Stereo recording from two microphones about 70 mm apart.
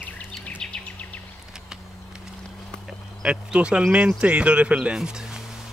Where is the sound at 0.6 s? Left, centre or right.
Centre.